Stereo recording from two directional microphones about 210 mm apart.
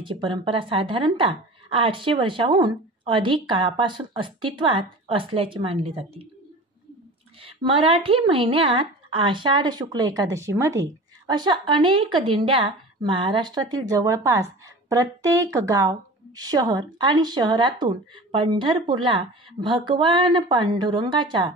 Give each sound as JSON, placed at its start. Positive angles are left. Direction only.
{"t": 0.0, "sound": "a woman's voice", "side_deg": -25}
{"t": 7.6, "sound": "a woman's voice", "side_deg": -25}